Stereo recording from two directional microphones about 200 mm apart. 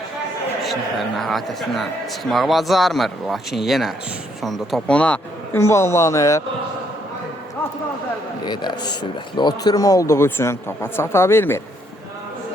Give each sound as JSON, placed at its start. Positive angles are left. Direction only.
{"t": 0.6, "sound": "speech", "side_deg": 0}
{"t": 8.4, "sound": "speech", "side_deg": 20}